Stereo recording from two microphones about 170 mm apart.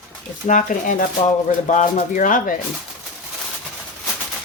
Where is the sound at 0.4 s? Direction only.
50° left (ahead or behind).